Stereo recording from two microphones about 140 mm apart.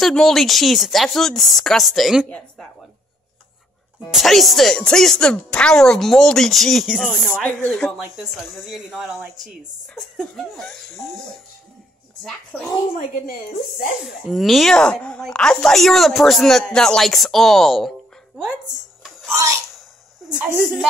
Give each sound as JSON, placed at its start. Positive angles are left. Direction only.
{"t": 0.0, "sound": "speech", "side_deg": 0}
{"t": 4.1, "sound": "speech", "side_deg": 0}
{"t": 7.1, "sound": "speech", "side_deg": 10}
{"t": 12.2, "sound": "speech", "side_deg": 5}
{"t": 13.1, "sound": "a woman's voice", "side_deg": 90}
{"t": 14.0, "sound": "speech", "side_deg": -5}
{"t": 19.3, "sound": "a woman's voice", "side_deg": -20}